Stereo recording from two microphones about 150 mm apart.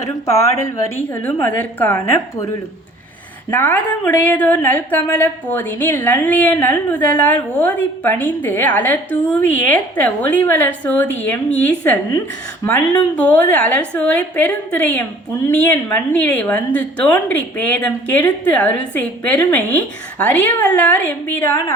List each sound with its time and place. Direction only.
1.1 s a woman's voice: 15° left (ahead or behind)
3.5 s a woman's voice: 10° left (ahead or behind)